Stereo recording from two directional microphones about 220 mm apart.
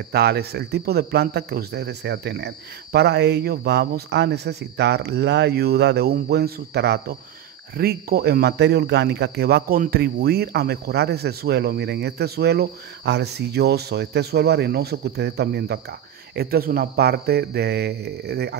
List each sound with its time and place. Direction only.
0.1 s speech: 45° right (ahead or behind)